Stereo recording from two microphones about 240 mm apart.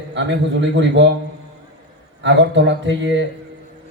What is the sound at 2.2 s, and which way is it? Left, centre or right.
Speech, right.